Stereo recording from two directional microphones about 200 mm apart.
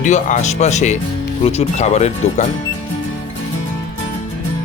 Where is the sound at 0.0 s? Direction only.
35° left (ahead or behind).